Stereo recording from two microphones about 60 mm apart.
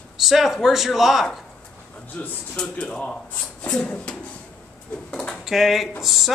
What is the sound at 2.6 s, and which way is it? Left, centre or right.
Speech, centre.